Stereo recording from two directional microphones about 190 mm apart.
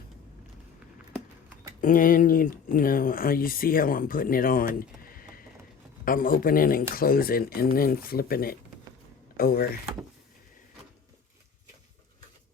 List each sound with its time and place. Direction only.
1.8 s speech: 45° left (ahead or behind)